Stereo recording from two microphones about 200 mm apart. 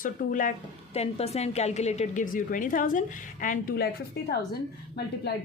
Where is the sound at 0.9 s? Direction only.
30° left (ahead or behind); by 5.4 s 55° left (ahead or behind).